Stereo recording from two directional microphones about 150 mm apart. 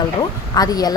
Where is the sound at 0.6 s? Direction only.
25° left (ahead or behind).